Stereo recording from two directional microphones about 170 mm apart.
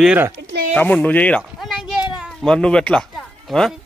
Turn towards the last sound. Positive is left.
turn(degrees=0)  # may be behind; listen again after turning